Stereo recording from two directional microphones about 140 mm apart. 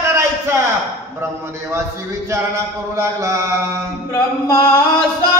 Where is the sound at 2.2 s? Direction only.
20° right (ahead or behind).